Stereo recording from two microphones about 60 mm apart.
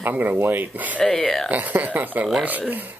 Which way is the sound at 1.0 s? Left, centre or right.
Centre.